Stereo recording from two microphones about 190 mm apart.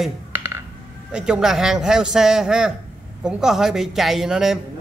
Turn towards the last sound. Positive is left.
turn(degrees=0)  # may be behind; listen again after turning